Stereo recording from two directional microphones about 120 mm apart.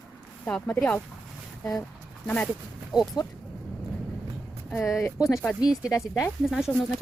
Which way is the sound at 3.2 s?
30° left (ahead or behind).